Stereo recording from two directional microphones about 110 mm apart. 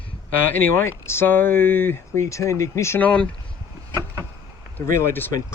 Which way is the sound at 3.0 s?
10° left (ahead or behind).